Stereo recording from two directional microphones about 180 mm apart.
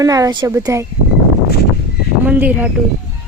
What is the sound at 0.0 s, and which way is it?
Speech, 20° right (ahead or behind).